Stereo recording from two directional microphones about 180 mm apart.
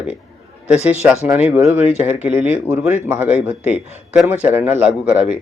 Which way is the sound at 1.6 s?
35° left (ahead or behind).